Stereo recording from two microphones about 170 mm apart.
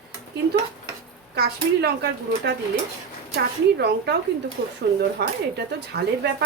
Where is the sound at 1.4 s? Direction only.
75° right (ahead or behind).